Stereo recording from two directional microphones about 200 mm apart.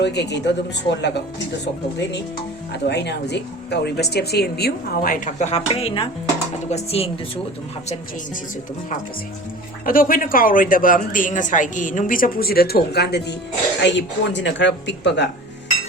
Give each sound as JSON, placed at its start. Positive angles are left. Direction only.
{"t": 0.0, "sound": "speech", "side_deg": 55}
{"t": 2.7, "sound": "speech", "side_deg": 60}
{"t": 9.8, "sound": "speech", "side_deg": 45}